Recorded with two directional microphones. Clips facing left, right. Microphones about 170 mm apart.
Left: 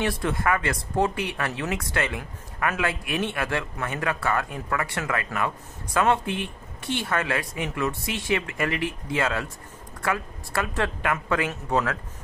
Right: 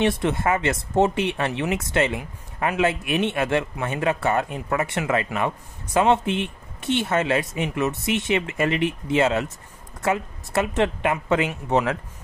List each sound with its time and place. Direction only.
0.0 s speech: 25° right (ahead or behind)